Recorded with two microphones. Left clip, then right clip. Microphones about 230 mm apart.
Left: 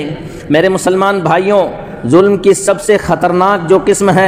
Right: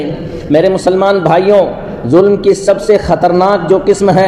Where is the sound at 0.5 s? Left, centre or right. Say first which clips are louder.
Right 1 dB; left.